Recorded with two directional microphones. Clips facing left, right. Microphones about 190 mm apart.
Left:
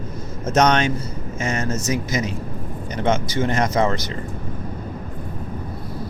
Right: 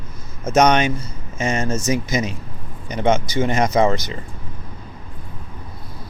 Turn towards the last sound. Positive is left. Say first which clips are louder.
# right 3 dB
turn(degrees=-15)  # may be behind; listen again after turning